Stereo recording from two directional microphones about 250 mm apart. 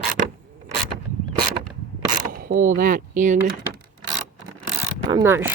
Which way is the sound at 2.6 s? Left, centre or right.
Right.